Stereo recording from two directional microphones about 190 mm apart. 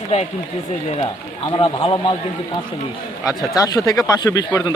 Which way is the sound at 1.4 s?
25° left (ahead or behind).